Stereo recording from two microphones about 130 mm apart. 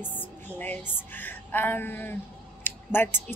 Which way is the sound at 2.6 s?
15° left (ahead or behind).